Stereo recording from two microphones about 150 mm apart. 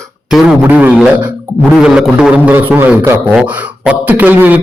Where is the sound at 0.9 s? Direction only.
Centre (ahead or behind).